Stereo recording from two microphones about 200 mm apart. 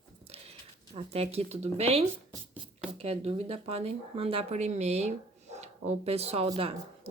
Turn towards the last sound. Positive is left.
turn(degrees=-30)  # may be behind; listen again after turning